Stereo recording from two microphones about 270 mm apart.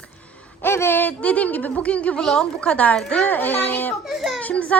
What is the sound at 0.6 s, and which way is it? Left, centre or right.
A woman's voice, centre.